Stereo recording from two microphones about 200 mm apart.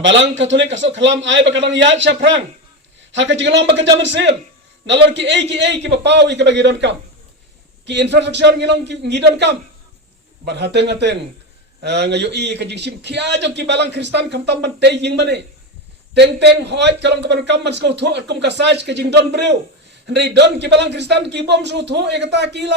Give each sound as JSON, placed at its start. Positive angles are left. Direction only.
{"t": 0.0, "sound": "a man's voice", "side_deg": -65}